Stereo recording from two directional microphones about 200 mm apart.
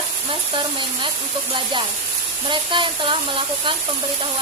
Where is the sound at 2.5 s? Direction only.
25° right (ahead or behind).